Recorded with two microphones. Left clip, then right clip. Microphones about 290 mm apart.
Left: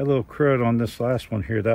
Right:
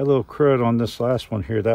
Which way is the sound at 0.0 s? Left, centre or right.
Right.